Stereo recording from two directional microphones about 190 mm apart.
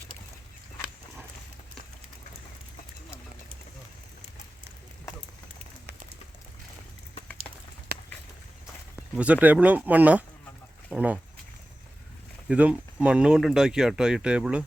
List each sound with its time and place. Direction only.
7.9 s a sound: 55° right (ahead or behind)
9.1 s speech: 5° right (ahead or behind)
10.8 s duck: 5° right (ahead or behind)
12.5 s speech: 5° right (ahead or behind)